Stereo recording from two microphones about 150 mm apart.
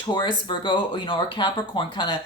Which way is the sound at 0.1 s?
35° left (ahead or behind).